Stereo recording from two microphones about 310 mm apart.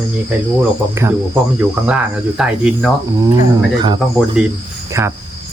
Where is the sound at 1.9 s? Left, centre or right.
Centre.